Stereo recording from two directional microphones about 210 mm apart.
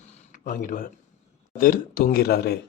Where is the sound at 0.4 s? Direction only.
40° left (ahead or behind).